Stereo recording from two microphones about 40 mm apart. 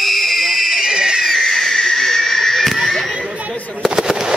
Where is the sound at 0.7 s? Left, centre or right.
Centre.